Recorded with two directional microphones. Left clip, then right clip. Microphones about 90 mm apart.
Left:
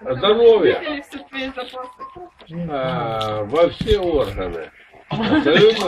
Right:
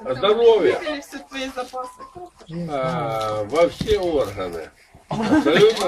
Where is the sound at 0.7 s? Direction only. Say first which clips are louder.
Left 1 dB; 5° right (ahead or behind).